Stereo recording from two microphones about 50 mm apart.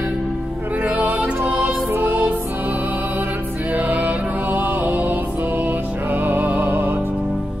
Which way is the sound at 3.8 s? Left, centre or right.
Right.